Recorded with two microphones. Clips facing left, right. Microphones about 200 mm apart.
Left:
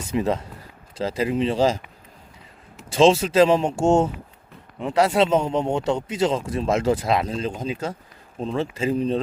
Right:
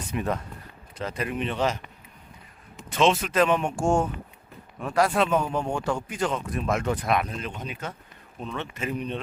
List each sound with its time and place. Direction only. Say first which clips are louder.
0.1 s speech: left 6 dB; 25° left (ahead or behind)
2.9 s speech: left 6 dB; 30° left (ahead or behind)